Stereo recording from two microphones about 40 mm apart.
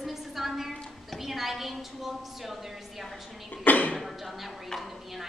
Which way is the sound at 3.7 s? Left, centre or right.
Left.